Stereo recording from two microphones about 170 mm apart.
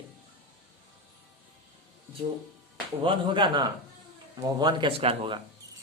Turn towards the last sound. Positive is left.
turn(degrees=-30)  # may be behind; listen again after turning